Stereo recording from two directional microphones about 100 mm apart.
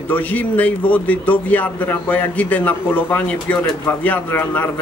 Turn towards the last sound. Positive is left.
turn(degrees=20)  # may be behind; listen again after turning